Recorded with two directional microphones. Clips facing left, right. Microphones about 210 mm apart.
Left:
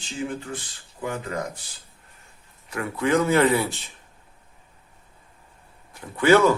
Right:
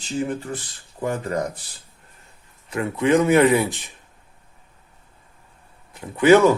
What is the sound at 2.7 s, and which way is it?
Speech, 20° right (ahead or behind).